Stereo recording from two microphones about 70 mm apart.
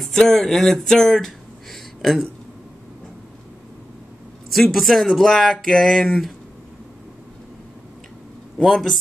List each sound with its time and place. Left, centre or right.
0.0 s speech: centre
4.5 s speech: centre
8.6 s speech: centre